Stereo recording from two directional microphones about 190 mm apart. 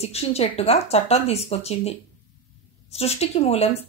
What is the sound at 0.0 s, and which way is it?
A woman's voice, 35° left (ahead or behind).